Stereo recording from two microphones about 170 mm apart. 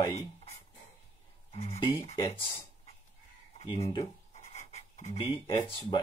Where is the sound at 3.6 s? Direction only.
20° left (ahead or behind).